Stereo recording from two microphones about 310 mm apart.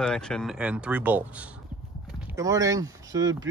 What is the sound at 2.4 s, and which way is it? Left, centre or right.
Speech, centre.